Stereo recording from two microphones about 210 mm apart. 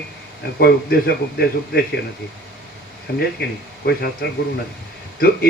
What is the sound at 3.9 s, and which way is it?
Speech, 50° left (ahead or behind).